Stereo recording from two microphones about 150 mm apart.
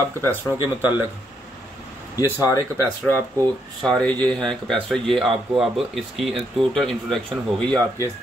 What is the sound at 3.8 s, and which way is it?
Speech, 5° left (ahead or behind).